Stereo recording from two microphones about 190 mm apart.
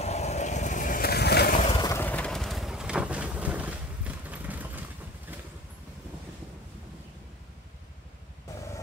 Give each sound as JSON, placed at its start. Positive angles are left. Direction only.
{"t": 0.0, "sound": "vehicle", "side_deg": 35}
{"t": 1.8, "sound": "vehicle", "side_deg": 15}